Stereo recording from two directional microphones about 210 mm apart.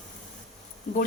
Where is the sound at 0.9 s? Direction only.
40° left (ahead or behind).